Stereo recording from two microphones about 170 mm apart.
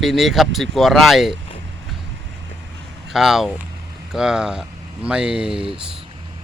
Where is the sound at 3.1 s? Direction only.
Centre (ahead or behind).